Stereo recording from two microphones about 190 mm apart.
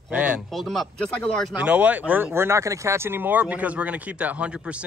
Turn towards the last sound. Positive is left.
turn(degrees=-5)  # may be behind; listen again after turning